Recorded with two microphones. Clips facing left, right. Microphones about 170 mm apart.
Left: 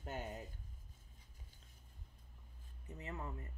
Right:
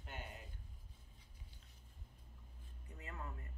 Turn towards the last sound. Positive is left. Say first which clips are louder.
# left 4 dB
turn(degrees=25)  # may be behind; listen again after turning